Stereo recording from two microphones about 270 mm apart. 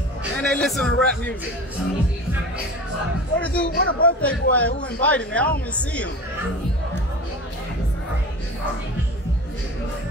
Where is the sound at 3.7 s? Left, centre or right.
Left.